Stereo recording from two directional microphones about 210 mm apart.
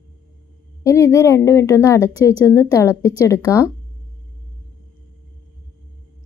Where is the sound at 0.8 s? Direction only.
15° left (ahead or behind).